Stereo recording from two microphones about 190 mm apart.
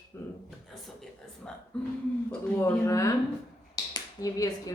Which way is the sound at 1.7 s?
5° left (ahead or behind).